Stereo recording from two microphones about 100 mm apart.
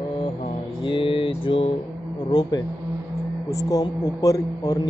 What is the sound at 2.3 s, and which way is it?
Mantra, 45° left (ahead or behind).